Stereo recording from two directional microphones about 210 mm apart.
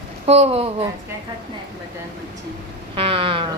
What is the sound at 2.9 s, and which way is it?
Speech, 25° right (ahead or behind).